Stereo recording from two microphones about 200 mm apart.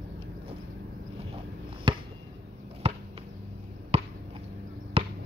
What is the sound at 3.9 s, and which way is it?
Chop, 30° right (ahead or behind).